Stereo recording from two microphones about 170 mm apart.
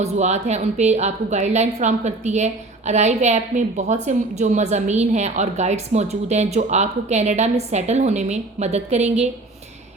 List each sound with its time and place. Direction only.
0.0 s a woman's voice: 40° right (ahead or behind)